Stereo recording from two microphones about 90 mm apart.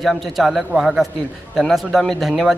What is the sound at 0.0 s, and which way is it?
A man's voice, centre (ahead or behind).